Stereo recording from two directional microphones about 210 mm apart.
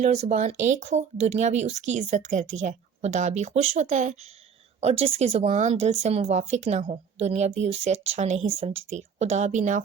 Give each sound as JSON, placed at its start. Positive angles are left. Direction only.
{"t": 0.0, "sound": "a woman's voice", "side_deg": -35}